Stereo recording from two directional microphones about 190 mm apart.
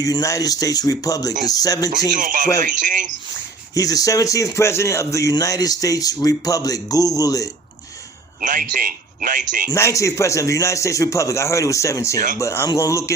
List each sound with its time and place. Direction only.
0.0 s speech: 20° left (ahead or behind)
2.1 s speech: 45° right (ahead or behind)
3.8 s speech: 20° left (ahead or behind)
8.4 s speech: 45° right (ahead or behind)
9.6 s a man's voice: 15° left (ahead or behind)